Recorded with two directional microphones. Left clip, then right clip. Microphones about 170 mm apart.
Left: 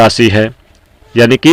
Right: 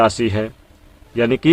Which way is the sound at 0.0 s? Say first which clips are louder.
Left 8 dB; 30° left (ahead or behind).